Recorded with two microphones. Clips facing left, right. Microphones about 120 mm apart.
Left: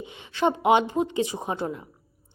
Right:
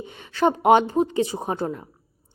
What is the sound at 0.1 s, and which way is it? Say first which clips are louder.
A woman's voice: right 3 dB; 45° right (ahead or behind).